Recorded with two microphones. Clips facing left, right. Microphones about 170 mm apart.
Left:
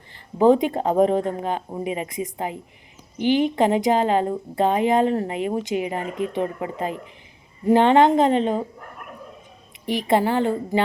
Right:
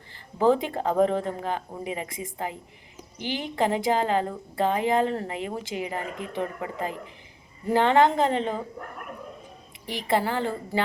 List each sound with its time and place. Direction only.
0.3 s a woman's voice: 20° left (ahead or behind)
9.8 s a woman's voice: 20° left (ahead or behind)